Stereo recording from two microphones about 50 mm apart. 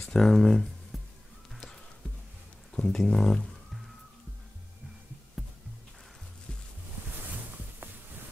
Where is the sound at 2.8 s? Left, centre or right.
Centre.